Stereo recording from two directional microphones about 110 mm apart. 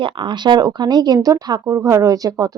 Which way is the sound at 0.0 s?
45° right (ahead or behind).